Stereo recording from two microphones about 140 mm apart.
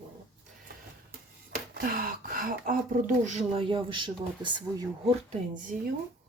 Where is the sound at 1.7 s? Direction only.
90° right.